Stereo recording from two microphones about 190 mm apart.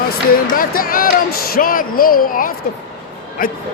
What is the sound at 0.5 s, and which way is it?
Speech, 50° left (ahead or behind).